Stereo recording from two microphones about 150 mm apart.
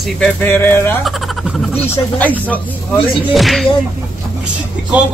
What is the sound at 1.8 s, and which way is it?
Speech, 10° left (ahead or behind).